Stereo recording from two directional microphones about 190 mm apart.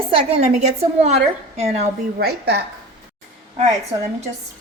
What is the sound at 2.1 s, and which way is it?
Speech, 60° right (ahead or behind).